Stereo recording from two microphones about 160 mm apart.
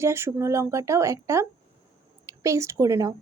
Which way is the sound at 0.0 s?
15° right (ahead or behind).